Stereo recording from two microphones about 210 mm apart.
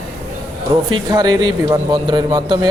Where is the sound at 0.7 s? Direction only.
20° right (ahead or behind).